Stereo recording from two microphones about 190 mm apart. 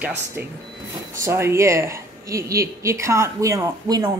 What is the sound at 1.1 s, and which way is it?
A woman's voice, 15° right (ahead or behind).